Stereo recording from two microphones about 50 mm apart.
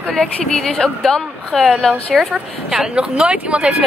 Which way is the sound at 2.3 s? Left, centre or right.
Centre.